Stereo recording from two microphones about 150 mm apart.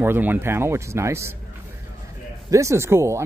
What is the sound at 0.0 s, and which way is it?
Speech, 15° right (ahead or behind).